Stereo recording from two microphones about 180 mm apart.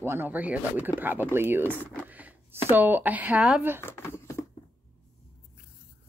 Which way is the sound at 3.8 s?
15° left (ahead or behind).